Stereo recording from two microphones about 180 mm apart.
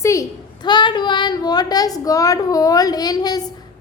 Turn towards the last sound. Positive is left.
turn(degrees=20)  # may be behind; listen again after turning